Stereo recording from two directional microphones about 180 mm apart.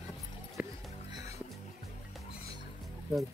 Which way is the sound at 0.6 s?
10° right (ahead or behind).